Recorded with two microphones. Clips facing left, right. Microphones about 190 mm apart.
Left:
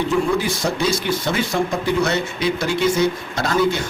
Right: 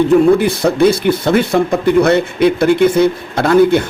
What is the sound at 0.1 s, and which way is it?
Speech, 60° right (ahead or behind).